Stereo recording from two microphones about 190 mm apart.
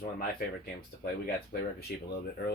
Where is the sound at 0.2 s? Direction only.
50° left (ahead or behind).